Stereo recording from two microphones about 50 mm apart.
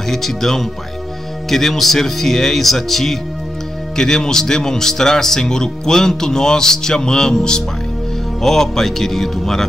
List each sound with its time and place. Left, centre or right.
0.1 s speech: centre